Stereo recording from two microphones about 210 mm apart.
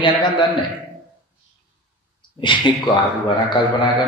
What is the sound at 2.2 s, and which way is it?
Speech, 25° left (ahead or behind).